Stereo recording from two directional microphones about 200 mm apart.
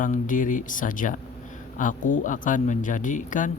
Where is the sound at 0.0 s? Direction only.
40° left (ahead or behind).